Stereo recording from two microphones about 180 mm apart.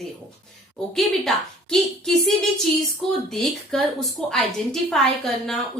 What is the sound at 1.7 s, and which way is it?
A woman's voice, centre (ahead or behind).